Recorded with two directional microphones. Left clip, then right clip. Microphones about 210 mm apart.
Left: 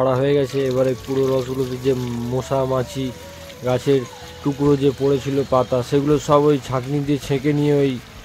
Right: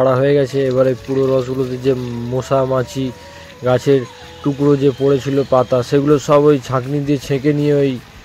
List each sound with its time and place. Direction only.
0.0 s speech: 10° right (ahead or behind)